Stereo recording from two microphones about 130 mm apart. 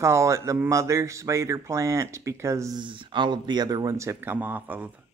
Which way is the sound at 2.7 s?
40° right (ahead or behind).